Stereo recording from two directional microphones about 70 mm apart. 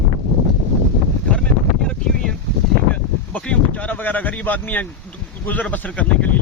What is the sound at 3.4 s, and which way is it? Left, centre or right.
Speech, centre.